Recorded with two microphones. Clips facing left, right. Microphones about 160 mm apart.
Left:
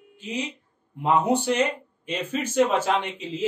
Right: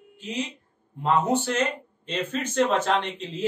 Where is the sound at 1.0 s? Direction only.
15° left (ahead or behind).